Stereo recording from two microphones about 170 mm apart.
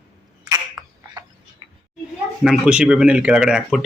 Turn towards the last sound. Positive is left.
turn(degrees=-5)  # may be behind; listen again after turning